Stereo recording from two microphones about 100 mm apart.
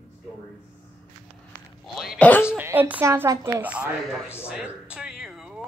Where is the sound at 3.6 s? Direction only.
10° right (ahead or behind).